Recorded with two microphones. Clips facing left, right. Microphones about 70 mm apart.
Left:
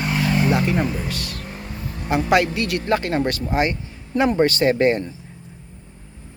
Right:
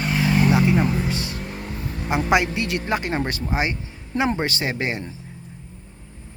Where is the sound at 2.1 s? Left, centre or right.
Right.